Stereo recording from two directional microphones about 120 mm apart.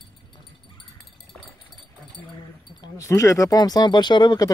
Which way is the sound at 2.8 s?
25° left (ahead or behind).